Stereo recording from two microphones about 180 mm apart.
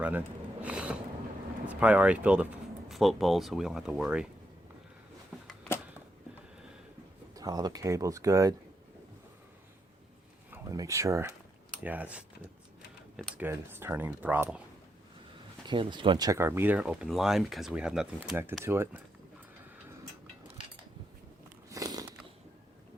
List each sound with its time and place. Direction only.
0.6 s a sound: 5° right (ahead or behind)
1.6 s speech: 5° right (ahead or behind)
7.3 s speech: 20° right (ahead or behind)
10.5 s speech: 15° right (ahead or behind)
15.6 s speech: 25° right (ahead or behind)
21.7 s biting: 20° right (ahead or behind)